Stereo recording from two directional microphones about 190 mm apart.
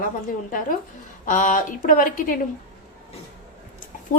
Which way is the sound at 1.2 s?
40° left (ahead or behind).